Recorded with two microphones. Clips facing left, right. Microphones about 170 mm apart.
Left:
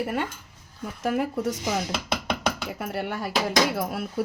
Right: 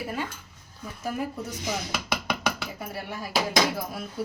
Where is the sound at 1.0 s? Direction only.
90° left.